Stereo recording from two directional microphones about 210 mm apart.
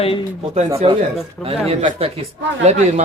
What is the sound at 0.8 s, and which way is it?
Speech, 30° right (ahead or behind).